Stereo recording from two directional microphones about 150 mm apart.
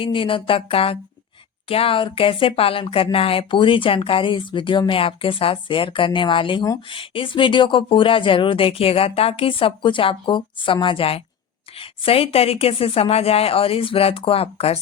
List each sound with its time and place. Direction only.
0.0 s speech: 35° left (ahead or behind)